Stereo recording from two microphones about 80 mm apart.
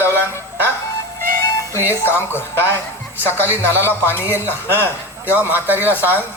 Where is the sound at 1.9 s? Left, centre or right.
Left.